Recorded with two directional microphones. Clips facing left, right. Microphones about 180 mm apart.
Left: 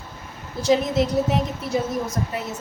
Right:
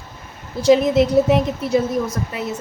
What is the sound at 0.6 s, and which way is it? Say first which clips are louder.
Speech: right 6 dB; 60° right (ahead or behind).